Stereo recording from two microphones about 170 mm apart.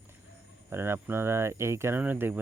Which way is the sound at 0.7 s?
15° right (ahead or behind).